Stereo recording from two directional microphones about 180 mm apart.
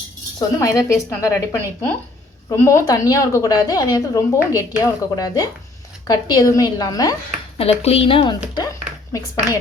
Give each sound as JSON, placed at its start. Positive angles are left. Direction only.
{"t": 0.3, "sound": "a woman's voice", "side_deg": 20}
{"t": 7.6, "sound": "speech", "side_deg": 35}